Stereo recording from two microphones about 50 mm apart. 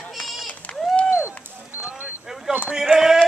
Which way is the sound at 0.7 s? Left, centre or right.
Centre.